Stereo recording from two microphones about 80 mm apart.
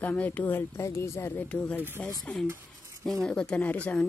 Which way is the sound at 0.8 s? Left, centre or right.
Left.